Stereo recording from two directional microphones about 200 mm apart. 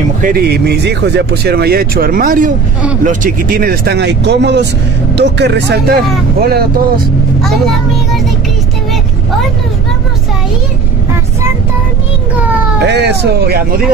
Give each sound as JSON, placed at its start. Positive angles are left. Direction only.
{"t": 0.2, "sound": "speech", "side_deg": -50}
{"t": 12.8, "sound": "speech", "side_deg": -60}